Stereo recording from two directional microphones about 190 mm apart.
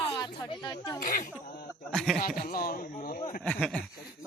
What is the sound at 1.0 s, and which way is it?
Speech, 45° left (ahead or behind).